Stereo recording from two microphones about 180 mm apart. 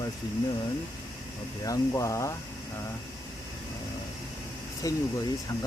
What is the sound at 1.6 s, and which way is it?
Speech, 20° left (ahead or behind).